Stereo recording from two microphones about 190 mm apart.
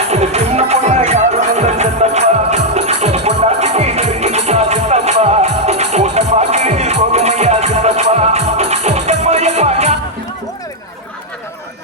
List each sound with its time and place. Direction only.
0.1 s music: 35° right (ahead or behind)